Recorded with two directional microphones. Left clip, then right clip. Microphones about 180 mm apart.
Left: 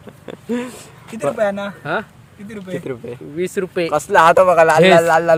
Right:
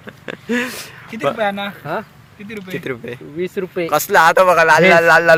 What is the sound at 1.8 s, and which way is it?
Speech, 15° left (ahead or behind).